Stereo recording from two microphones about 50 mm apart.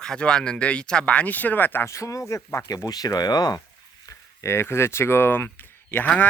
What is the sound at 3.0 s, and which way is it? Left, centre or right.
Speech, left.